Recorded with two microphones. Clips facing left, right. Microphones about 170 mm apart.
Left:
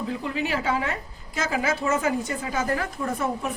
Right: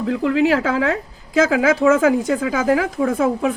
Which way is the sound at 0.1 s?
90° right.